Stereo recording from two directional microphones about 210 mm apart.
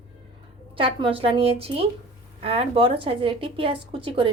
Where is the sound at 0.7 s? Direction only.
25° right (ahead or behind).